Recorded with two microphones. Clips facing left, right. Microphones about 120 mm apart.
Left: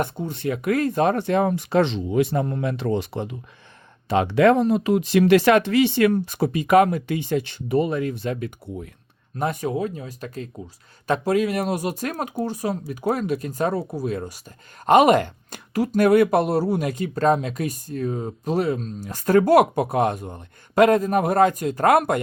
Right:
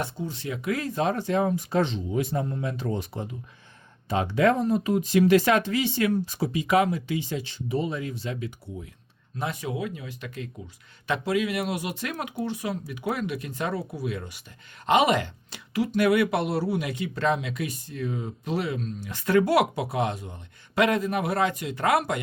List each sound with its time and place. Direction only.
0.0 s speech: 55° left (ahead or behind); by 14.4 s 40° left (ahead or behind)
14.8 s speech: 50° left (ahead or behind)